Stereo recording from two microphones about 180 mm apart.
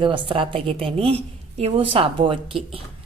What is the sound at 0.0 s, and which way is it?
Speech, 25° right (ahead or behind).